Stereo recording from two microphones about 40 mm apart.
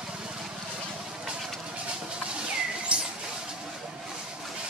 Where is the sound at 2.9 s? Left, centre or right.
Right.